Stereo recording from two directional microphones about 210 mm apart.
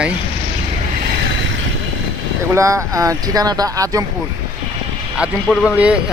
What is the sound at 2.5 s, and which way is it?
Speech, 15° right (ahead or behind).